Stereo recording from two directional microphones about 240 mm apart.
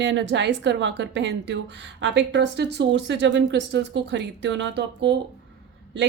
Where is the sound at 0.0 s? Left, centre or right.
Right.